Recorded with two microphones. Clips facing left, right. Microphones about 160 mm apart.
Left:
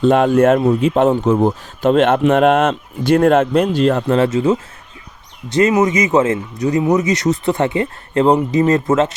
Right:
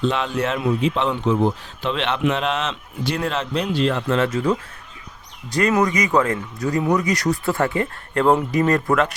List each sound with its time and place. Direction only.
0.0 s speech: 50° left (ahead or behind)
4.0 s speech: 30° left (ahead or behind)